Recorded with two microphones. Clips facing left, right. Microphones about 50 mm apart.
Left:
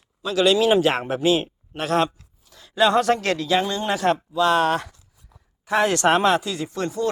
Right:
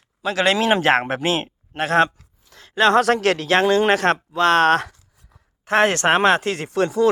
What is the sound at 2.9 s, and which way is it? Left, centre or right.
A man's voice, right.